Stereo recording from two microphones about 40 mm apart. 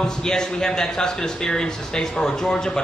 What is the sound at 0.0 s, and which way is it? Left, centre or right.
Speech, centre.